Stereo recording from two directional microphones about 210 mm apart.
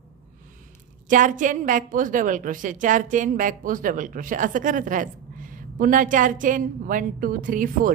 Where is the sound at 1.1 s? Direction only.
35° right (ahead or behind).